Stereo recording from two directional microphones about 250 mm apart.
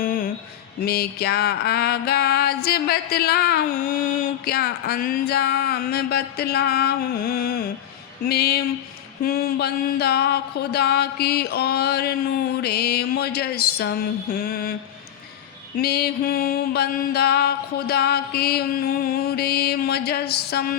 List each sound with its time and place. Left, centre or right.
0.0 s mantra: left
0.9 s music: left
15.8 s music: left